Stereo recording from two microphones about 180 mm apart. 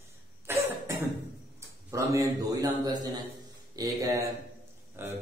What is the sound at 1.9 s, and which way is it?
A man's voice, 15° right (ahead or behind).